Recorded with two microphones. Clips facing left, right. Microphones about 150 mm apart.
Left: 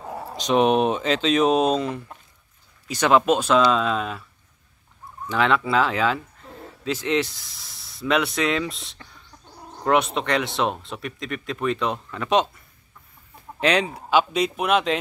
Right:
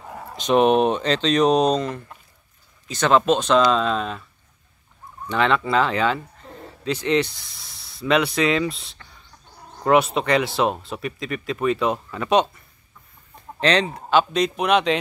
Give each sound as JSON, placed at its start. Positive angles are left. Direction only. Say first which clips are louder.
{"t": 0.0, "sound": "a sound", "louder": "left 3 dB", "side_deg": 25}
{"t": 0.4, "sound": "speech", "louder": "right 2 dB", "side_deg": 0}
{"t": 5.3, "sound": "speech", "louder": "right 1 dB", "side_deg": 0}